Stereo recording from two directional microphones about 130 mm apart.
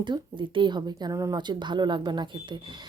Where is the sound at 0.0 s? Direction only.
40° right (ahead or behind).